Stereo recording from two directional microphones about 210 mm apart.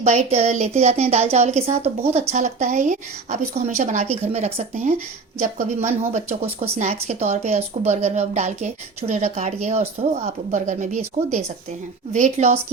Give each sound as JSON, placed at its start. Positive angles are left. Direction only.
{"t": 0.0, "sound": "speech", "side_deg": -30}